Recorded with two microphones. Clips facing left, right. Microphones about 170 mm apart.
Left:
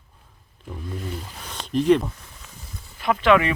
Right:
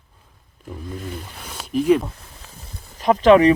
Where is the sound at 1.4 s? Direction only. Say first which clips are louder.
Right 1 dB; 10° right (ahead or behind).